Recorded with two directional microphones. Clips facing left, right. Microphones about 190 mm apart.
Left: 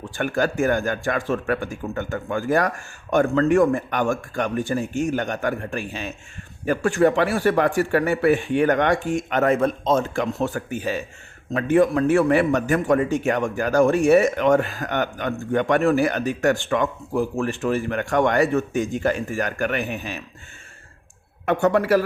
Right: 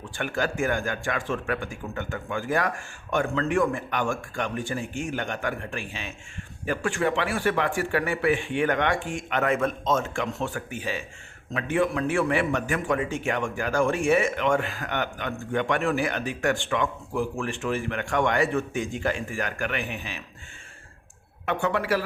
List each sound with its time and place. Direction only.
0.2 s a man's voice: 45° left (ahead or behind)
21.4 s speech: 40° left (ahead or behind)